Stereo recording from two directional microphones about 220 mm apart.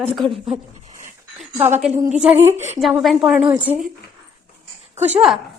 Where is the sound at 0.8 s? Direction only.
35° right (ahead or behind).